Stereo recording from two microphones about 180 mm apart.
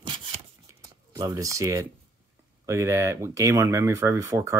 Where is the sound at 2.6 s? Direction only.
15° right (ahead or behind).